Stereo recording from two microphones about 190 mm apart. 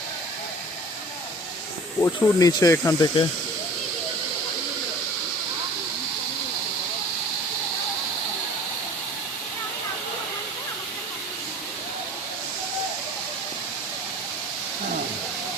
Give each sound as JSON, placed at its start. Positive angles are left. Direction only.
{"t": 2.0, "sound": "speech", "side_deg": 20}